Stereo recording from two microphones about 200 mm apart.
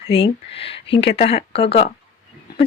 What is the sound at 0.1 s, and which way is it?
Speech, 30° left (ahead or behind).